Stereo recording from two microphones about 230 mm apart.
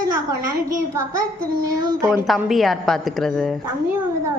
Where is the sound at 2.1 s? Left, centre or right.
Centre.